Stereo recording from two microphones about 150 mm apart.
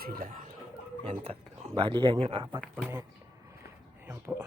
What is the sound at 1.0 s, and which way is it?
Speech, 40° right (ahead or behind).